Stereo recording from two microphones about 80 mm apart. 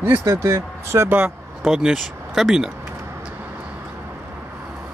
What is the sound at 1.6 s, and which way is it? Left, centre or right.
Speech, centre.